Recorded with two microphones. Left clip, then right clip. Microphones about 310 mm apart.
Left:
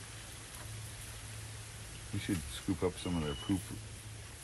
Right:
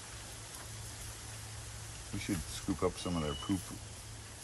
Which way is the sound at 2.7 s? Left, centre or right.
Centre.